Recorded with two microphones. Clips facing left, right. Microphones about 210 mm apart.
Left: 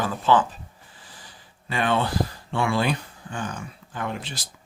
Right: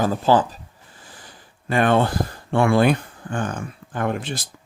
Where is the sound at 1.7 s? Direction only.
50° right (ahead or behind).